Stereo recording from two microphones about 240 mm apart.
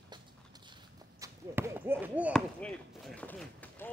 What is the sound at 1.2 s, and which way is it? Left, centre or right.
Speech, centre.